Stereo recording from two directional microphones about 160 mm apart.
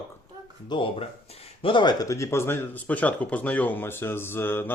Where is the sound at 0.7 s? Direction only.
30° left (ahead or behind).